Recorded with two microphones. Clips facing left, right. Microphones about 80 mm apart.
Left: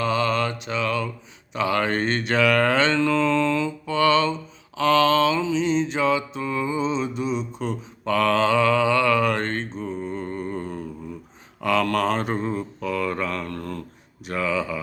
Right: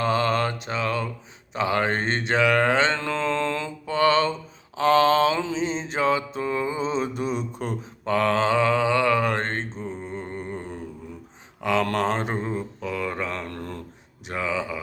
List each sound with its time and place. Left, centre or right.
0.0 s mantra: right
8.0 s mantra: right